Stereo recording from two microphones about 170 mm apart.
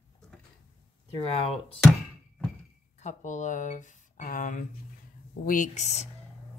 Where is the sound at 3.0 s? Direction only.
45° left (ahead or behind).